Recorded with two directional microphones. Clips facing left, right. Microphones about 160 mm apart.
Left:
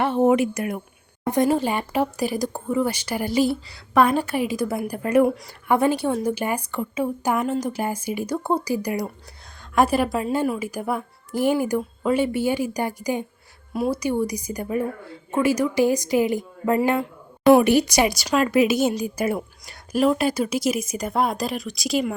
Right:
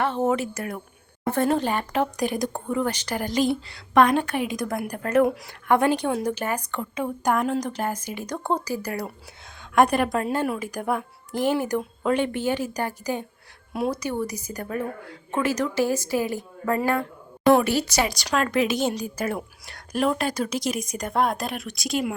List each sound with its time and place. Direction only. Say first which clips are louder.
0.0 s a woman's voice: left 5 dB; 15° left (ahead or behind)
9.7 s a woman's voice: even; 5° left (ahead or behind)
13.7 s a woman's voice: left 2 dB; centre (ahead or behind)
14.0 s a woman's voice: left 4 dB; 10° left (ahead or behind)